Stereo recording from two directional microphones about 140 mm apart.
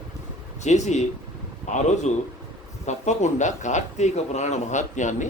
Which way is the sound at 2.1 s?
55° left (ahead or behind).